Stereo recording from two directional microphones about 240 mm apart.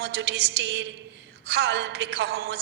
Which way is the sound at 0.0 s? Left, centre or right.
Right.